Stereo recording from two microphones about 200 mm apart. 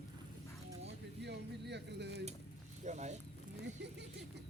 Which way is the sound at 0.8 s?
55° right (ahead or behind).